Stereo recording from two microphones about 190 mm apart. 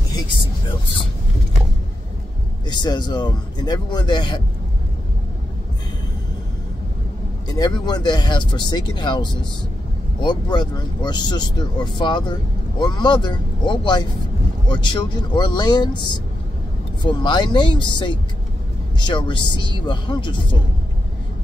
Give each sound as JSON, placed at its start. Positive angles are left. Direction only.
{"t": 2.6, "sound": "speech", "side_deg": 20}
{"t": 7.4, "sound": "speech", "side_deg": 20}